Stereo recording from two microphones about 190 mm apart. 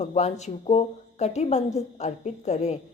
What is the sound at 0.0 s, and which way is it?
A woman's voice, 35° left (ahead or behind).